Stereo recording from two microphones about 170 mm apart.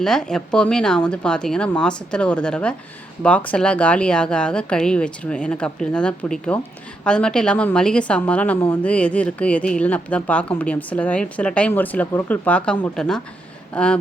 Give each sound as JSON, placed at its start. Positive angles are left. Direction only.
{"t": 0.0, "sound": "a woman's voice", "side_deg": 5}